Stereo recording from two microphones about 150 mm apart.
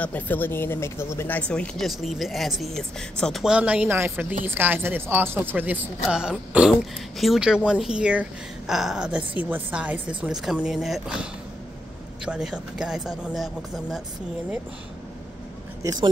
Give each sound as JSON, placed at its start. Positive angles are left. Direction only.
{"t": 0.0, "sound": "speech", "side_deg": 10}
{"t": 12.3, "sound": "speech", "side_deg": -5}
{"t": 15.8, "sound": "speech", "side_deg": -25}